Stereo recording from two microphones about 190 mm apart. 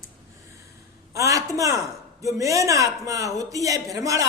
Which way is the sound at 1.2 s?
15° right (ahead or behind).